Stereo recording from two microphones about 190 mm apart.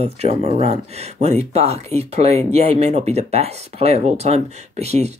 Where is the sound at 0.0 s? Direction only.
35° right (ahead or behind).